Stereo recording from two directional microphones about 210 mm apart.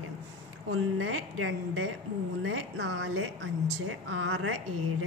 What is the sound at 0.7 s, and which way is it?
A woman's voice, 75° right (ahead or behind).